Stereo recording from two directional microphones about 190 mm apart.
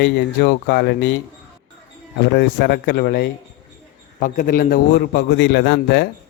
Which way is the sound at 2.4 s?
55° left (ahead or behind).